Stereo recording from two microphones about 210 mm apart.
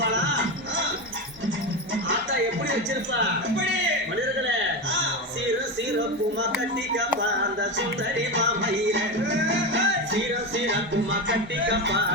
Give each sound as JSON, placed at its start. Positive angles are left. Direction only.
{"t": 8.4, "sound": "music", "side_deg": -60}